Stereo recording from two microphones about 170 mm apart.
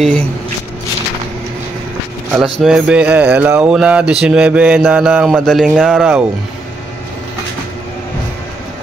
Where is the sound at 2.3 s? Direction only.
5° right (ahead or behind).